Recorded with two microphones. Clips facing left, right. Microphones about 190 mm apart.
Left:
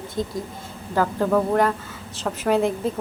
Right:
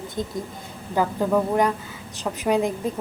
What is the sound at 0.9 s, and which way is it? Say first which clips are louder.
A woman's voice: left 1 dB; 10° right (ahead or behind).